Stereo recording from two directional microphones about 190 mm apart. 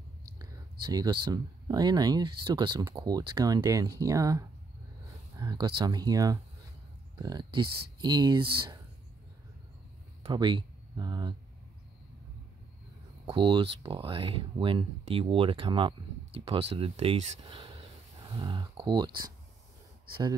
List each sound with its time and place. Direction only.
0.4 s speech: 20° right (ahead or behind)
10.2 s speech: 25° right (ahead or behind)
13.2 s speech: 25° right (ahead or behind)